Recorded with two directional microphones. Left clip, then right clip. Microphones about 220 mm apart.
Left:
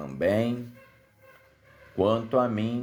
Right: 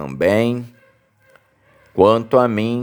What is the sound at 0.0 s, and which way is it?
Speech, 35° right (ahead or behind).